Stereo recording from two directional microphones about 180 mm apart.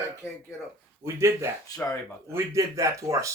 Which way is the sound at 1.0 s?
15° right (ahead or behind).